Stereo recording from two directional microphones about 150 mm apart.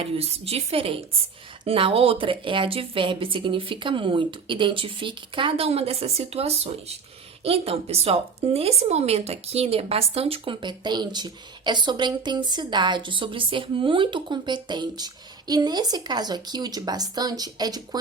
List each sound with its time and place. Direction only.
0.0 s a woman's voice: 40° right (ahead or behind)